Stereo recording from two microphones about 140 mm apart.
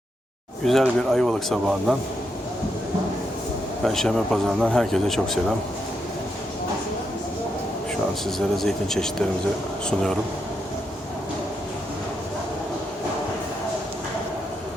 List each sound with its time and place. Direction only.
0.6 s speech: centre (ahead or behind)
3.8 s speech: centre (ahead or behind)
8.4 s speech: centre (ahead or behind)